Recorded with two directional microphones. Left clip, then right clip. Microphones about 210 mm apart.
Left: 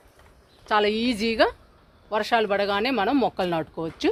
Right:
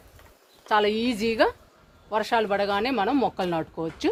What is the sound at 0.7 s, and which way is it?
Speech, 50° left (ahead or behind).